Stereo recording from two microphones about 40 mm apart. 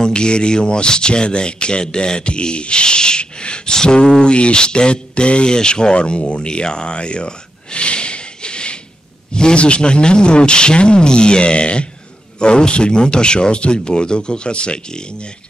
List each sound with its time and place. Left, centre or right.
0.0 s speech: left